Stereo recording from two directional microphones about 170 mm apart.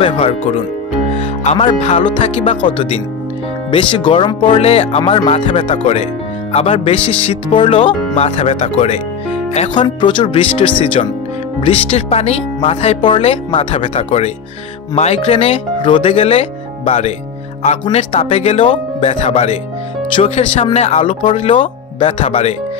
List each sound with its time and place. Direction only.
0.0 s speech: 35° left (ahead or behind)
1.4 s music: 40° left (ahead or behind)
1.8 s speech: 35° left (ahead or behind)
9.8 s speech: 30° left (ahead or behind)